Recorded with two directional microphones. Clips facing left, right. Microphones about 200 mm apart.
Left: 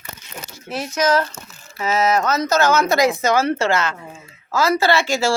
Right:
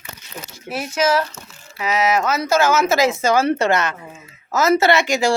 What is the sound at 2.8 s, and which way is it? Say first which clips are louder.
A woman's voice: even; 25° right (ahead or behind).